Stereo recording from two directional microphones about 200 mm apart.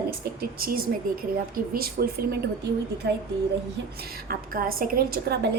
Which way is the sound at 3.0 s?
60° right (ahead or behind).